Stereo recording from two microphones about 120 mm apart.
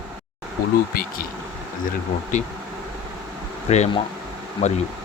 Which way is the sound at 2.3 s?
90° left.